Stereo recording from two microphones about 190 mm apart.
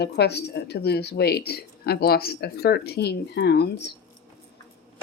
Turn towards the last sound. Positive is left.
turn(degrees=60)  # may be behind; listen again after turning